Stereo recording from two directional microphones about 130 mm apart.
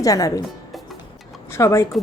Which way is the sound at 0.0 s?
25° left (ahead or behind).